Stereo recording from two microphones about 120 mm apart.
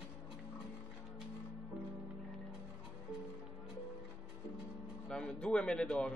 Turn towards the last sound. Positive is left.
turn(degrees=10)  # may be behind; listen again after turning